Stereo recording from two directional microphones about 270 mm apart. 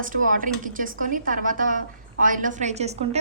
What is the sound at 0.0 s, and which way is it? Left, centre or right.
A woman's voice, right.